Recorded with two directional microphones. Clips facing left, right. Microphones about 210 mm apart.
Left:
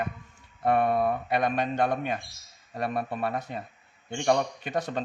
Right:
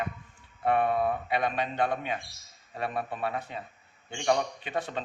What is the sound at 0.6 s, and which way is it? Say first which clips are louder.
Speech: left 2 dB; 40° left (ahead or behind).